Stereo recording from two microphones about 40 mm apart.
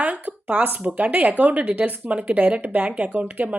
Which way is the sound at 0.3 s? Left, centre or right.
Right.